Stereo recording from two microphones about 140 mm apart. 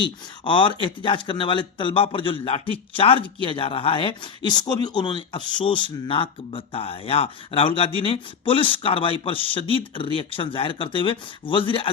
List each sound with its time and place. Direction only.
0.0 s speech: 35° left (ahead or behind)